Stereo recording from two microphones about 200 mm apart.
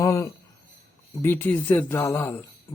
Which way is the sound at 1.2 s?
10° left (ahead or behind).